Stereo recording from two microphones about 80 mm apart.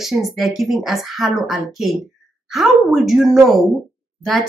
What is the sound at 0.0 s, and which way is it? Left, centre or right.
Speech, centre.